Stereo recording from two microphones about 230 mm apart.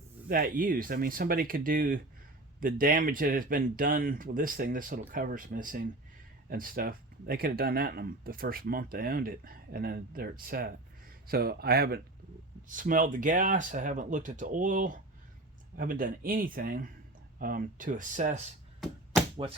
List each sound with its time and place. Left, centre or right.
0.3 s speech: right